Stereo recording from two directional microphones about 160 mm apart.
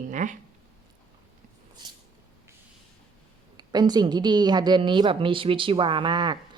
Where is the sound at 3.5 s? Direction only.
25° right (ahead or behind).